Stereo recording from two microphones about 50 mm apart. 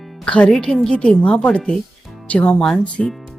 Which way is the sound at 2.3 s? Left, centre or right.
Left.